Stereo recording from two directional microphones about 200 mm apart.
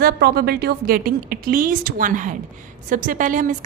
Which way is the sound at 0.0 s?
50° right (ahead or behind).